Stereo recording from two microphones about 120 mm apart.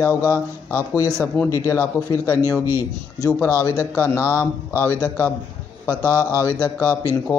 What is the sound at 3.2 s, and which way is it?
Speech, 25° left (ahead or behind).